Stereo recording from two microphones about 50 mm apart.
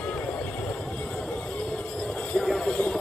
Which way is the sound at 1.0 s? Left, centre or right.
Centre.